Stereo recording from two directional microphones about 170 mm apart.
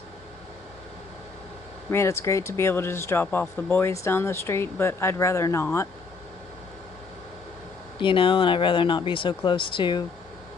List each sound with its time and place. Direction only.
1.9 s speech: 15° left (ahead or behind)
8.0 s speech: 30° left (ahead or behind)